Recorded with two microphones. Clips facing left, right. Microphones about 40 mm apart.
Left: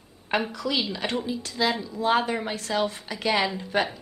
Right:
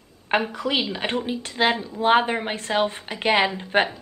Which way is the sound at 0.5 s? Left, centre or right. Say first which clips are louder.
Right 3 dB; right.